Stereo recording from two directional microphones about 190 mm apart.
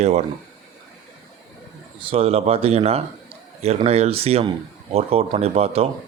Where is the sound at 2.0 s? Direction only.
30° right (ahead or behind).